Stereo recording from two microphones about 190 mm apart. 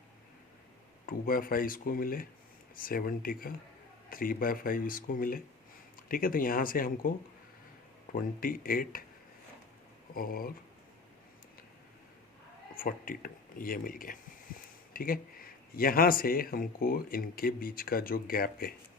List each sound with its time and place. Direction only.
1.0 s speech: 50° left (ahead or behind)
8.1 s speech: 50° left (ahead or behind)
10.2 s speech: 50° left (ahead or behind)
12.7 s speech: 50° left (ahead or behind)